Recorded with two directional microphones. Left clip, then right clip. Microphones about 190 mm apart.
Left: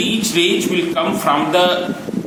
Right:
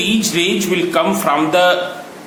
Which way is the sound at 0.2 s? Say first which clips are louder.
Left 1 dB; 40° right (ahead or behind).